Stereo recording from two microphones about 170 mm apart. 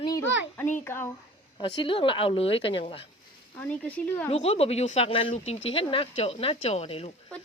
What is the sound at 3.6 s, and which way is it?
Speech, 10° left (ahead or behind).